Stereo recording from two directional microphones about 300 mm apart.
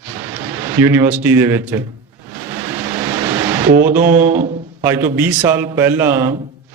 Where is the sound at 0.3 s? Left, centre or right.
Centre.